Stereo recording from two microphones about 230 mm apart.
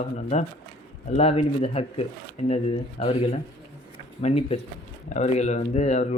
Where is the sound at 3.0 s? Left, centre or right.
Left.